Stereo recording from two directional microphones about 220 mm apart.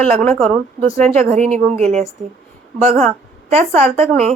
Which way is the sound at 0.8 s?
30° right (ahead or behind).